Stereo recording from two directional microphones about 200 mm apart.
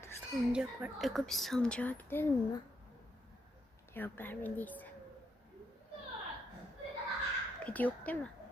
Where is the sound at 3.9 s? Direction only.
10° left (ahead or behind).